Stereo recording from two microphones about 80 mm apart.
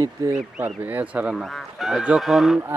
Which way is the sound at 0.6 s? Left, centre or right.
Right.